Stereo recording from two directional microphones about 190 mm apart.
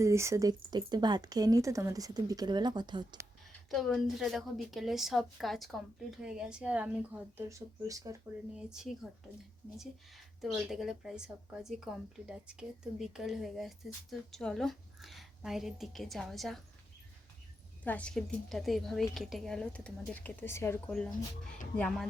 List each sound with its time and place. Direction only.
0.0 s speech: 15° right (ahead or behind)
3.7 s a woman's voice: centre (ahead or behind); by 8.1 s 20° right (ahead or behind)
8.5 s a woman's voice: centre (ahead or behind)
10.4 s a woman's voice: centre (ahead or behind)
17.8 s a woman's voice: 5° left (ahead or behind)